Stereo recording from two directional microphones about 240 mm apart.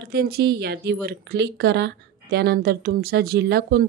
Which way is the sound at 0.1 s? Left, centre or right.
Right.